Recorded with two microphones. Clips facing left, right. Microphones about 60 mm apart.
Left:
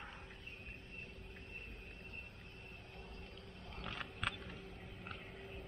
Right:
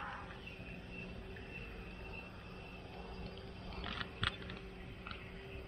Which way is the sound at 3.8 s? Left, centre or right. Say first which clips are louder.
Right 2 dB; left.